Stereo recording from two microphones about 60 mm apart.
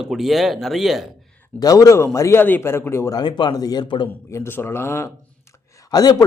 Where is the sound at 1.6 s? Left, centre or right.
Left.